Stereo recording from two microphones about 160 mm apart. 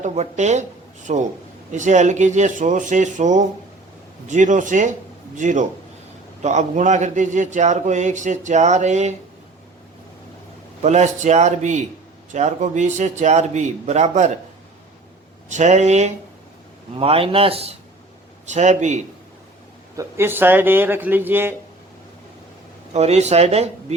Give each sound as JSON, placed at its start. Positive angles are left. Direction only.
{"t": 0.0, "sound": "a man's voice", "side_deg": -45}
{"t": 10.8, "sound": "speech", "side_deg": -45}
{"t": 15.4, "sound": "speech", "side_deg": -45}
{"t": 20.0, "sound": "a man's voice", "side_deg": -15}
{"t": 22.9, "sound": "speech", "side_deg": -45}